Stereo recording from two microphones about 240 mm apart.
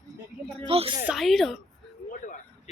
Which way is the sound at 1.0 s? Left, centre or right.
Centre.